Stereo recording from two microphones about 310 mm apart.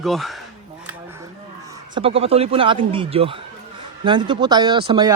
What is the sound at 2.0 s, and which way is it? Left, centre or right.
Speech, centre.